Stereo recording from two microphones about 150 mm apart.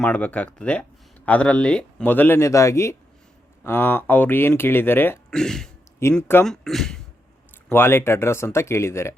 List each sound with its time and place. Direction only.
0.0 s speech: 10° left (ahead or behind)
5.3 s speech: 5° left (ahead or behind)
6.1 s speech: 15° left (ahead or behind)
6.4 s speech: centre (ahead or behind)
7.7 s speech: 15° left (ahead or behind)